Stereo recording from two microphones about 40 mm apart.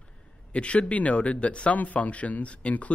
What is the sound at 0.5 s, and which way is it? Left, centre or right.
Speech, left.